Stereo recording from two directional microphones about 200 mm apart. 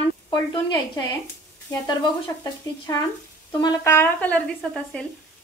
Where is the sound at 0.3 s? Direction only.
20° left (ahead or behind).